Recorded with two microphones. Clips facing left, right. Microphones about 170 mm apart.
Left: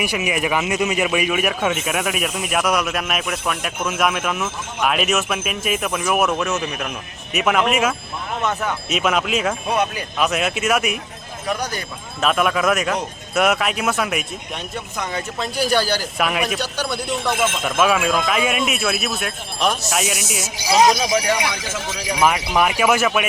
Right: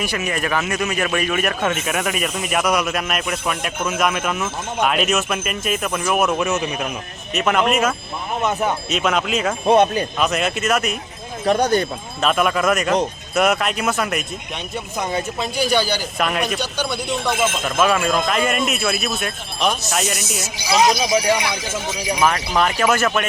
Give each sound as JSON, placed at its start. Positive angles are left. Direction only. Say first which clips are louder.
{"t": 0.0, "sound": "speech", "louder": "left 1 dB", "side_deg": 10}
{"t": 8.4, "sound": "speech", "louder": "right 3 dB", "side_deg": -20}
{"t": 8.9, "sound": "speech", "louder": "even", "side_deg": 5}
{"t": 9.6, "sound": "speech", "louder": "right 11 dB", "side_deg": -30}
{"t": 10.2, "sound": "speech", "louder": "left 3 dB", "side_deg": 0}
{"t": 11.4, "sound": "speech", "louder": "right 8 dB", "side_deg": -30}
{"t": 12.2, "sound": "speech", "louder": "even", "side_deg": 0}
{"t": 15.4, "sound": "speech", "louder": "left 1 dB", "side_deg": 0}
{"t": 22.2, "sound": "speech", "louder": "left 1 dB", "side_deg": 15}